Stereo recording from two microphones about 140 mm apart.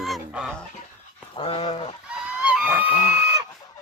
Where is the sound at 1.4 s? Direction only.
40° left (ahead or behind).